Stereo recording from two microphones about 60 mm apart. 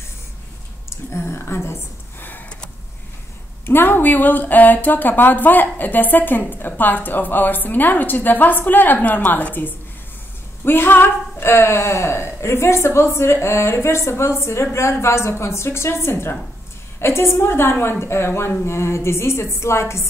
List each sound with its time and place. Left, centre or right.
0.8 s speech: left
3.6 s a woman's voice: left